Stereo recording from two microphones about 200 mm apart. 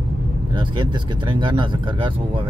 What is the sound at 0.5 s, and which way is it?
Speech, 25° right (ahead or behind).